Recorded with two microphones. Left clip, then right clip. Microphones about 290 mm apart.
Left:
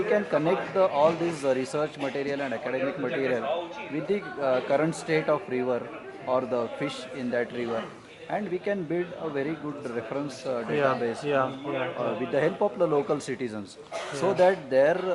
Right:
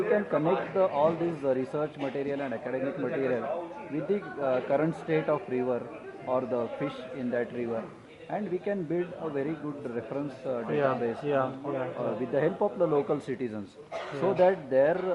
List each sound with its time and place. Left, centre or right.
0.0 s speech: centre